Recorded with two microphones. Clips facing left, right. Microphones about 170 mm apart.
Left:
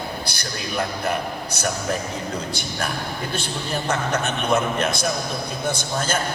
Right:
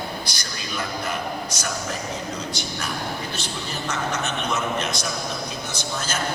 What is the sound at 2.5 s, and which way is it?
Speech, 55° left (ahead or behind).